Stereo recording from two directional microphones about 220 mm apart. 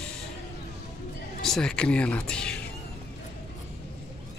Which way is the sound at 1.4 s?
Centre (ahead or behind).